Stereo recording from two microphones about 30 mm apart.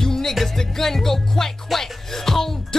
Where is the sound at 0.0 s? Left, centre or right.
Centre.